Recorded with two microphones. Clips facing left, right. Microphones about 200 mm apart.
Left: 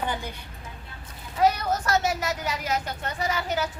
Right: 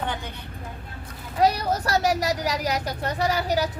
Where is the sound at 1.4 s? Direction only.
35° right (ahead or behind).